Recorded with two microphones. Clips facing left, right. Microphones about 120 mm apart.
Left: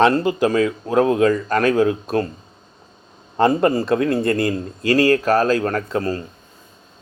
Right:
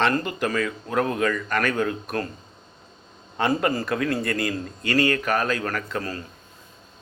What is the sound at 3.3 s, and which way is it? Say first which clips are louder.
Speech: left 7 dB; 30° left (ahead or behind).